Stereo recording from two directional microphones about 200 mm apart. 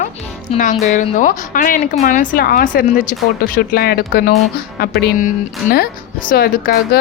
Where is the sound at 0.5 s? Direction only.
35° left (ahead or behind).